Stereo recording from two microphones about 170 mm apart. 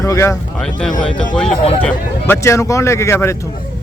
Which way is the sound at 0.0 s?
20° left (ahead or behind).